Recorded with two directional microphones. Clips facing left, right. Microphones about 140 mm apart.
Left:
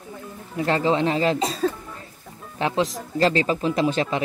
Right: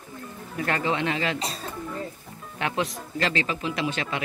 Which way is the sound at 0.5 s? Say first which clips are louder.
Left 5 dB; 25° left (ahead or behind).